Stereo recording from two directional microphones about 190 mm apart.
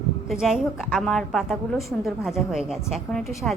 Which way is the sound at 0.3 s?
Centre (ahead or behind).